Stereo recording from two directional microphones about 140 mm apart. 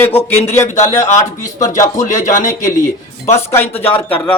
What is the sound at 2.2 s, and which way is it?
Speech, 65° left (ahead or behind).